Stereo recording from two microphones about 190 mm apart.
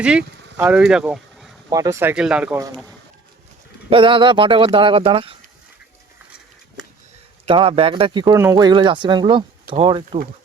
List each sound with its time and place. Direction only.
0.0 s speech: 5° right (ahead or behind)
1.7 s speech: 15° right (ahead or behind)
3.8 s speech: 25° right (ahead or behind)
7.4 s speech: 30° right (ahead or behind)